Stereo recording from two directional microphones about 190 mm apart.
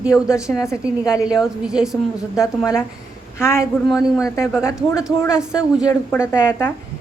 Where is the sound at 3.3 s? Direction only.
15° left (ahead or behind).